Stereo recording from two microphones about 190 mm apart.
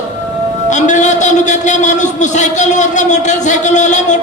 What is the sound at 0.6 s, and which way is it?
A man's voice, 40° left (ahead or behind).